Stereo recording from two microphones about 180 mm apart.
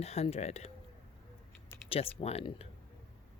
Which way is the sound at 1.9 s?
35° left (ahead or behind).